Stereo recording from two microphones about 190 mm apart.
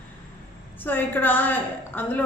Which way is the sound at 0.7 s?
10° left (ahead or behind).